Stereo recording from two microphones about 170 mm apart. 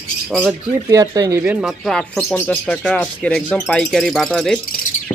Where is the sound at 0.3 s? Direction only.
5° left (ahead or behind).